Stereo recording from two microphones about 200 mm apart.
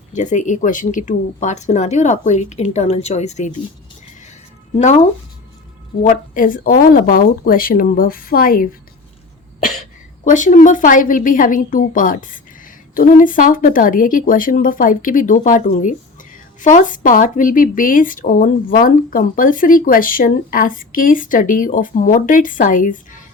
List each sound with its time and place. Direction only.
0.1 s speech: 40° left (ahead or behind)
6.0 s speech: 40° left (ahead or behind)
10.2 s speech: 40° left (ahead or behind)